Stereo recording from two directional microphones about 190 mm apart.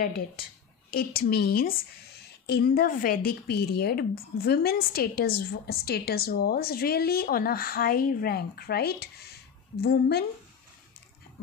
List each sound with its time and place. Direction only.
0.0 s a woman's voice: 50° left (ahead or behind)